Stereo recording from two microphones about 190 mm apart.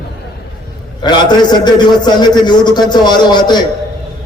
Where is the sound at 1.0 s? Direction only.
20° left (ahead or behind).